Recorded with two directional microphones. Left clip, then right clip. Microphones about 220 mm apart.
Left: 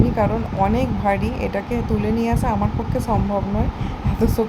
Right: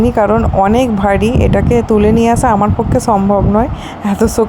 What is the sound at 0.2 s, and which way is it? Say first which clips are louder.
Speech: right 11 dB; 40° right (ahead or behind).